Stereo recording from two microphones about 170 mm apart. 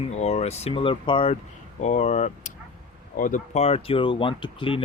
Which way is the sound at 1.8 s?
45° left (ahead or behind).